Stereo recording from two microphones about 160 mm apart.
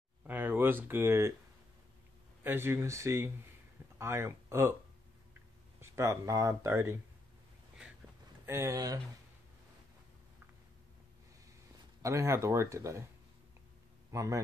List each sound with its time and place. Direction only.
0.3 s a sound: 10° right (ahead or behind)
2.4 s speech: 15° right (ahead or behind)
5.8 s speech: 15° right (ahead or behind)
8.5 s speech: 15° right (ahead or behind)
12.0 s speech: 20° right (ahead or behind)
14.1 s speech: 20° right (ahead or behind)